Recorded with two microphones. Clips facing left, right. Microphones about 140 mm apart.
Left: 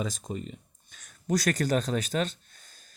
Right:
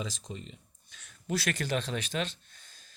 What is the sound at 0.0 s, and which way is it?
Speech, 50° left (ahead or behind).